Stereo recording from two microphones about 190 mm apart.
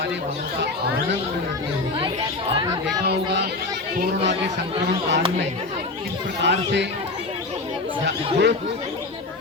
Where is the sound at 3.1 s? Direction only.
55° right (ahead or behind).